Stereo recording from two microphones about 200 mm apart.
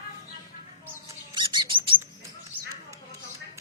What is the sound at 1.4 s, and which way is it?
Bird, 25° right (ahead or behind).